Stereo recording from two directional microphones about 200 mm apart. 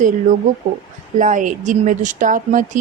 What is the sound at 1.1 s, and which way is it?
Speech, 40° right (ahead or behind).